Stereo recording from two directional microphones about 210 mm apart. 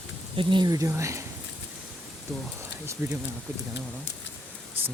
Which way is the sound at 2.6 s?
15° right (ahead or behind).